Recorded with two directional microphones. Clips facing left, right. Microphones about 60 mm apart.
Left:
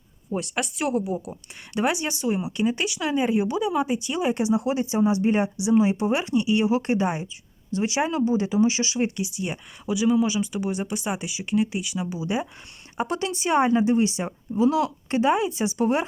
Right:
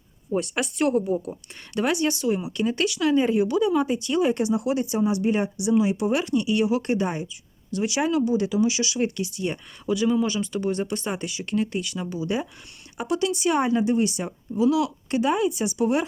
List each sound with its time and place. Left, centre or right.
0.3 s speech: centre
1.7 s speech: centre
13.0 s speech: left